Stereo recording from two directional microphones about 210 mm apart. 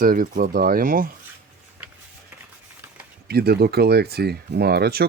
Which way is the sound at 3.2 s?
50° right (ahead or behind).